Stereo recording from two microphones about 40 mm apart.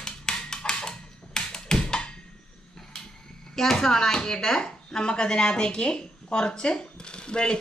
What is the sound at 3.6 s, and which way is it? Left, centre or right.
Speech, centre.